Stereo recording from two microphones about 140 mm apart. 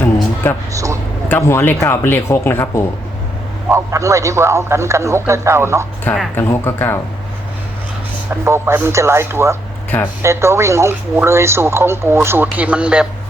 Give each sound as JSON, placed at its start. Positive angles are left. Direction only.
{"t": 0.7, "sound": "a man's voice", "side_deg": -25}
{"t": 1.3, "sound": "speech", "side_deg": 20}
{"t": 3.7, "sound": "a man's voice", "side_deg": -20}
{"t": 6.3, "sound": "speech", "side_deg": 15}
{"t": 8.4, "sound": "a man's voice", "side_deg": -20}